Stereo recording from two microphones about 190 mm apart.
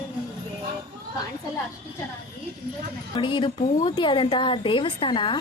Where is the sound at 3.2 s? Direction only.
25° left (ahead or behind).